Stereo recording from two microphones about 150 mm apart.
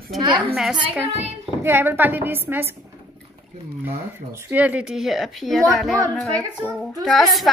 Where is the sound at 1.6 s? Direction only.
15° right (ahead or behind).